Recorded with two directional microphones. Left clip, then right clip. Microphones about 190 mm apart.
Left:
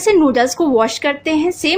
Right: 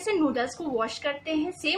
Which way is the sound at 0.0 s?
45° left (ahead or behind).